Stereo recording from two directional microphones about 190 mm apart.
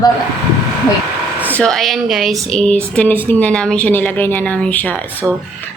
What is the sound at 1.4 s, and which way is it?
A woman's voice, 5° left (ahead or behind).